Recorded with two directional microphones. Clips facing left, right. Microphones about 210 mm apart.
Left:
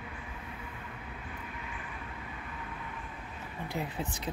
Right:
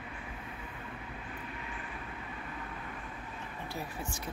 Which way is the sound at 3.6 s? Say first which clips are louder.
Left 5 dB; 20° left (ahead or behind).